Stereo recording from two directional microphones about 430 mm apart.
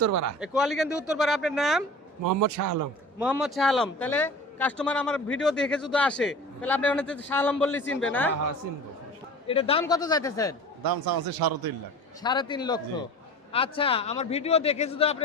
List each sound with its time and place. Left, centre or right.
0.0 s a man's voice: right
0.3 s a man's voice: centre
2.2 s a man's voice: right
3.2 s a man's voice: centre
9.5 s a man's voice: centre
10.8 s a man's voice: right
12.2 s a man's voice: centre